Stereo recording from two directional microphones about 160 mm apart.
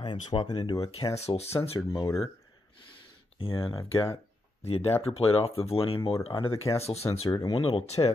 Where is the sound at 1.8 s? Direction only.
15° left (ahead or behind).